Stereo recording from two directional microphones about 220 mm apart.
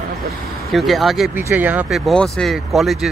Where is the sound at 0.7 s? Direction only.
Centre (ahead or behind).